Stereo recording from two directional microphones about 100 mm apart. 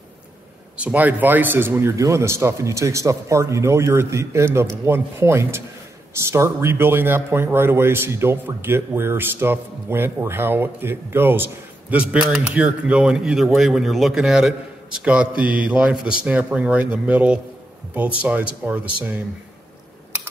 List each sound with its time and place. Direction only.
0.7 s a man's voice: 15° right (ahead or behind)